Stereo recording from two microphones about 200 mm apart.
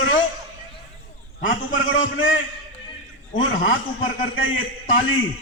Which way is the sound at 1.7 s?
80° left.